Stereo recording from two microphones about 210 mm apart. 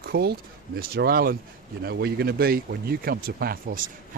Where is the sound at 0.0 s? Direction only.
45° right (ahead or behind).